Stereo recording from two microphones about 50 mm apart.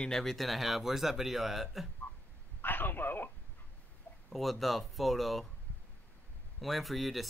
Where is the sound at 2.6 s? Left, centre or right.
Left.